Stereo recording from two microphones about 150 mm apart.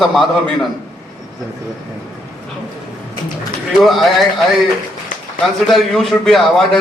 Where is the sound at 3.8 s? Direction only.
Centre (ahead or behind).